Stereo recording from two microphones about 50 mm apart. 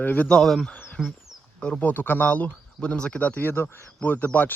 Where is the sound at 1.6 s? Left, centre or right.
Left.